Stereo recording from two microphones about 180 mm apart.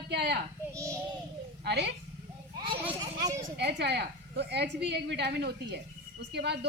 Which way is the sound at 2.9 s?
20° right (ahead or behind).